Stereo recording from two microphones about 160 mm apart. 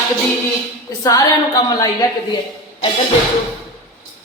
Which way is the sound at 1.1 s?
20° left (ahead or behind).